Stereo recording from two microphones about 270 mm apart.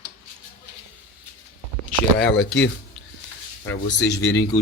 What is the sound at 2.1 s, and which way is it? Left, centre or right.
Speech, left.